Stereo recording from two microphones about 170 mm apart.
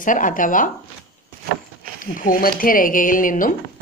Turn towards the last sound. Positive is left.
turn(degrees=50)  # may be behind; listen again after turning